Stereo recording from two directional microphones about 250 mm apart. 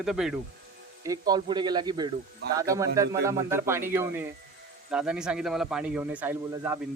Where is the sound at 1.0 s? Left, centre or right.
Centre.